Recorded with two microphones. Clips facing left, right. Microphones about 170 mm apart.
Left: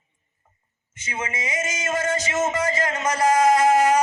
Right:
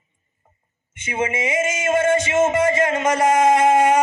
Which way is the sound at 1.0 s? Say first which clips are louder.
Right 7 dB; 25° right (ahead or behind).